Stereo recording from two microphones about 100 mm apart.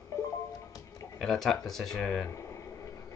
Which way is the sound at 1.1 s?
5° left (ahead or behind).